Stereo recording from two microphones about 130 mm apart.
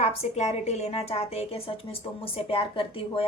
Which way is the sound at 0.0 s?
55° left (ahead or behind).